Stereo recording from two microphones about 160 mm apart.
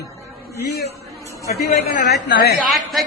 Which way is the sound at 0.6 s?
80° left.